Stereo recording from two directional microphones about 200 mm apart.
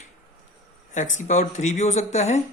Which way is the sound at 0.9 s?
35° left (ahead or behind).